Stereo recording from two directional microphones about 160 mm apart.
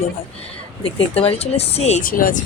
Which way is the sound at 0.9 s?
35° left (ahead or behind).